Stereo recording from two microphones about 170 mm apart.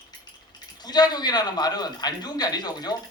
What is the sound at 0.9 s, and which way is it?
A man's voice, 25° left (ahead or behind).